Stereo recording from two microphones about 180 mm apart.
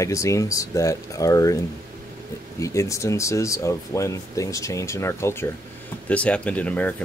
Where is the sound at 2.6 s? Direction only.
15° left (ahead or behind).